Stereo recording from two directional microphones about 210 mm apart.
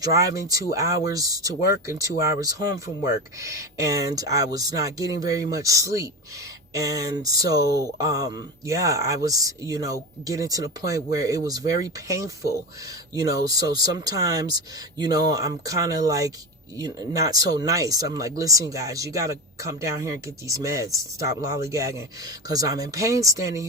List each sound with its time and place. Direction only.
0.0 s speech: 15° right (ahead or behind)